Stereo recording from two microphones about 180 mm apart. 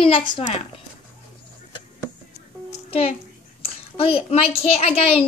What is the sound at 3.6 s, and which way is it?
A child's voice, 30° left (ahead or behind).